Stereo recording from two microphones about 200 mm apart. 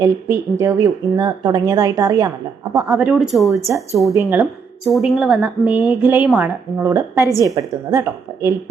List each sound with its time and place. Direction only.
0.0 s a woman's voice: 15° right (ahead or behind)
2.8 s speech: 5° right (ahead or behind)
4.1 s a woman's voice: 10° right (ahead or behind)
4.9 s a woman's voice: centre (ahead or behind)